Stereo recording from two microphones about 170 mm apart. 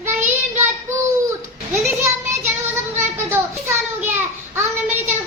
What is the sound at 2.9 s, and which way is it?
Children playing, 15° right (ahead or behind).